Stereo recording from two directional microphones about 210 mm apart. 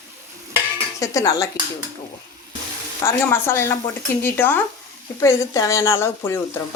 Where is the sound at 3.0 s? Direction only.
10° left (ahead or behind).